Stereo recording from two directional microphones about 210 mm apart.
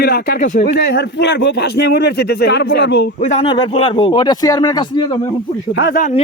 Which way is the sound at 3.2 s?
35° left (ahead or behind).